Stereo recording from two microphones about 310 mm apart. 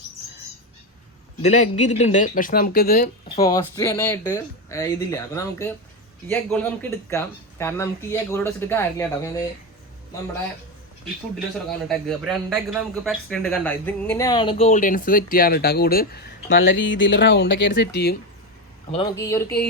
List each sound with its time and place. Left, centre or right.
1.4 s speech: left
3.2 s speech: centre
11.9 s a man's voice: centre; by 18.2 s left
18.9 s speech: centre